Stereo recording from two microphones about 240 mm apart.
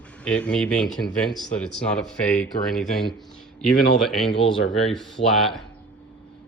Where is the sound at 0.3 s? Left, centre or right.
Centre.